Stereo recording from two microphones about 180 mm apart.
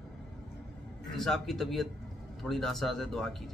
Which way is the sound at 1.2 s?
Centre (ahead or behind).